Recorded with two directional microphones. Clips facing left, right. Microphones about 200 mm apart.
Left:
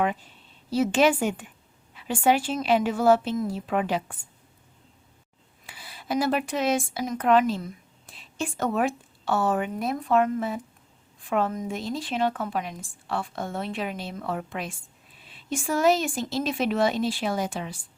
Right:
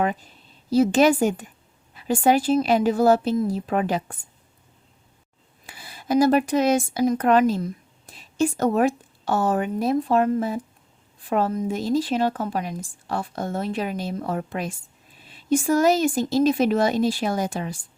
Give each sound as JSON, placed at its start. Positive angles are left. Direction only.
{"t": 0.0, "sound": "a woman's voice", "side_deg": -40}
{"t": 5.9, "sound": "a woman's voice", "side_deg": -45}